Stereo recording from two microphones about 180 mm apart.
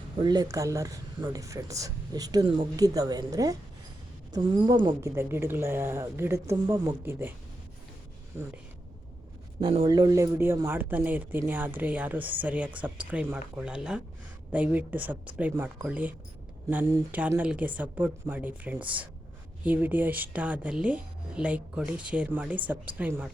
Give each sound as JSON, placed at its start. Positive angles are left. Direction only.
{"t": 0.2, "sound": "speech", "side_deg": -20}
{"t": 9.6, "sound": "speech", "side_deg": -25}